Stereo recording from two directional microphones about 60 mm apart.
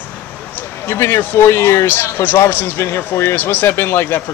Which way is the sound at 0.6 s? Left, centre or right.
Left.